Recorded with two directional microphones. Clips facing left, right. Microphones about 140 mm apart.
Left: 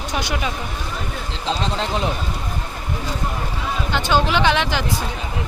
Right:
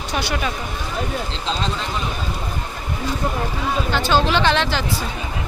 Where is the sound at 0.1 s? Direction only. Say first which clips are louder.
Right 1 dB; 15° left (ahead or behind).